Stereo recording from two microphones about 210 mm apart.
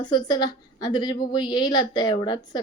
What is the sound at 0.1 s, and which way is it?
A woman's voice, 20° left (ahead or behind).